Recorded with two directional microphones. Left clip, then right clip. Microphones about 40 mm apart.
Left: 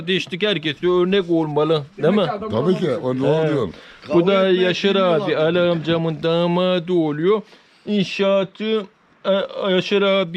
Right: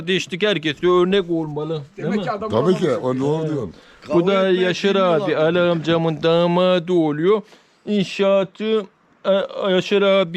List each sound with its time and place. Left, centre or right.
0.0 s speech: right
0.9 s speech: right
1.5 s a man's voice: right
2.0 s speech: right
2.5 s speech: right
3.3 s speech: centre
4.0 s speech: right
4.7 s speech: right
5.8 s speech: right
6.4 s speech: right